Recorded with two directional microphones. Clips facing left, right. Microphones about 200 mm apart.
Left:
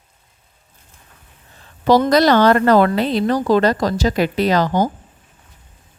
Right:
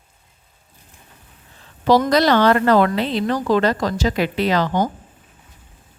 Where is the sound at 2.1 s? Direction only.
45° left (ahead or behind).